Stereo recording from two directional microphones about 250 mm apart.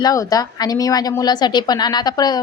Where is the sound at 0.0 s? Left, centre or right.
Centre.